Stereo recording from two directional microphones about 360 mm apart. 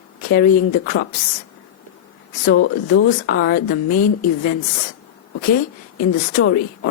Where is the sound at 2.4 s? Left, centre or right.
Left.